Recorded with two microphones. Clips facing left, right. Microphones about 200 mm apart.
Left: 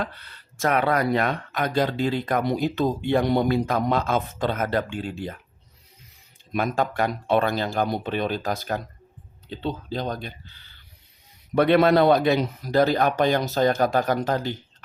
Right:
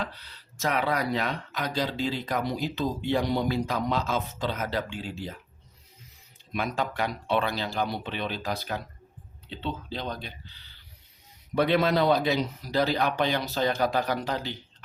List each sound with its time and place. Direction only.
0.0 s speech: 55° left (ahead or behind)
6.5 s speech: 50° left (ahead or behind)